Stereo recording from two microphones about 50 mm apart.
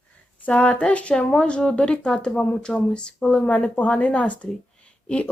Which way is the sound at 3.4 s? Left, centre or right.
Left.